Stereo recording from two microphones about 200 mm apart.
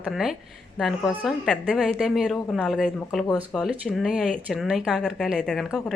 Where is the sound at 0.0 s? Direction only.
Centre (ahead or behind).